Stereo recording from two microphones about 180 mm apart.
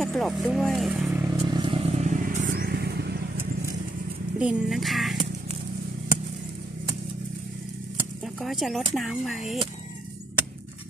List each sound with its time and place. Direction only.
0.0 s speech: centre (ahead or behind)
1.5 s vehicle: 30° right (ahead or behind); by 3.2 s 65° right (ahead or behind)
4.4 s speech: 5° right (ahead or behind)
8.4 s speech: centre (ahead or behind)